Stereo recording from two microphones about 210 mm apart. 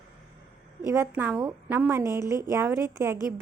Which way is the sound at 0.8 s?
10° right (ahead or behind).